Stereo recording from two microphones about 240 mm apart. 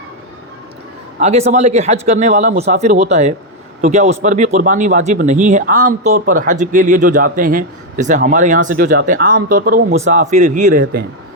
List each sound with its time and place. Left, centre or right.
1.2 s a man's voice: right